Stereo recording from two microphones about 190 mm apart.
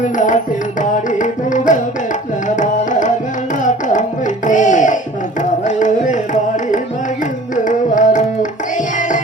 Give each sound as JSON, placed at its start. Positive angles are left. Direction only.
{"t": 0.0, "sound": "music", "side_deg": 40}
{"t": 4.4, "sound": "a sound", "side_deg": 40}
{"t": 5.4, "sound": "carnatic music", "side_deg": 40}
{"t": 7.5, "sound": "tabla", "side_deg": 40}
{"t": 9.0, "sound": "music", "side_deg": 40}